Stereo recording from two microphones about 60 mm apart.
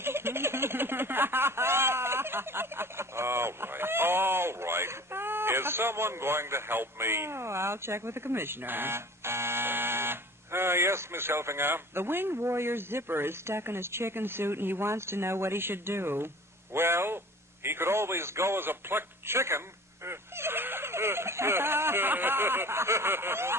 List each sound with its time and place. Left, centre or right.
0.0 s a man's voice: right